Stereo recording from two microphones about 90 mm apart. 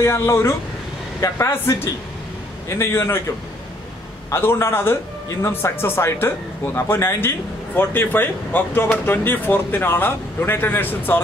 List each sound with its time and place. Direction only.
0.0 s speech: 30° left (ahead or behind)
4.3 s speech: 30° left (ahead or behind)